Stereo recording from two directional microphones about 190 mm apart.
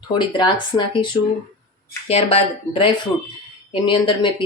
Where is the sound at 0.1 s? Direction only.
25° left (ahead or behind).